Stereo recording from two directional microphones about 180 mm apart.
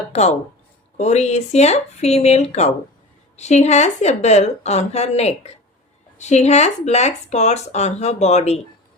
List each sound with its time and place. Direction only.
0.1 s speech: 35° left (ahead or behind)